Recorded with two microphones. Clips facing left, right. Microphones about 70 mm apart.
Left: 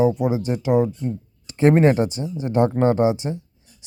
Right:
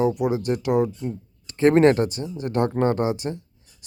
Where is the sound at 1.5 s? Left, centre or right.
Centre.